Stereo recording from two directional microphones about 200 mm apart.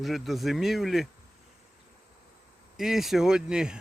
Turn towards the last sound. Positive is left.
turn(degrees=-5)  # may be behind; listen again after turning